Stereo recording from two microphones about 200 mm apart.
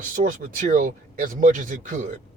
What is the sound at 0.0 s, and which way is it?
Speech, 40° right (ahead or behind).